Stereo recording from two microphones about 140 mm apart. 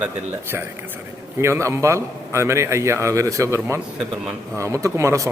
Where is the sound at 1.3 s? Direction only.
20° right (ahead or behind).